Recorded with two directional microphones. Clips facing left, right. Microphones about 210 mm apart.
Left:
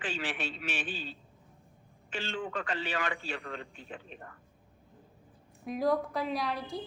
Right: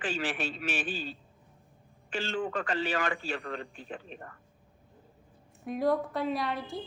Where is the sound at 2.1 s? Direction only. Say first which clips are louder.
Right 4 dB; 45° right (ahead or behind).